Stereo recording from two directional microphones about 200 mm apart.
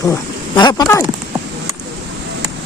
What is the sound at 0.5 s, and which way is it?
Speech, 20° left (ahead or behind).